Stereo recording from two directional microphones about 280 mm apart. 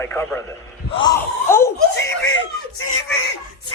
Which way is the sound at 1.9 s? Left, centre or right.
Left.